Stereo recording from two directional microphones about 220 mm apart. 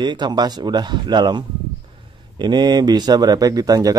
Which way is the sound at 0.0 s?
20° right (ahead or behind).